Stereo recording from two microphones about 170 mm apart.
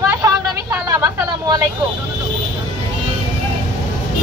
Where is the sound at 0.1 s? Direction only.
15° right (ahead or behind).